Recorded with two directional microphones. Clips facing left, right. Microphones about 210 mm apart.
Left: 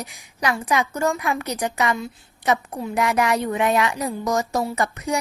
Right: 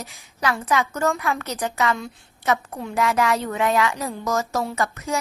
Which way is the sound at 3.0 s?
15° left (ahead or behind).